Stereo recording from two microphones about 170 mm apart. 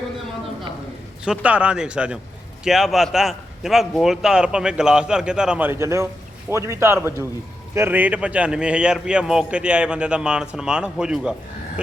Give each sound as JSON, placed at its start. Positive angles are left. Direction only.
{"t": 1.2, "sound": "a man's voice", "side_deg": -5}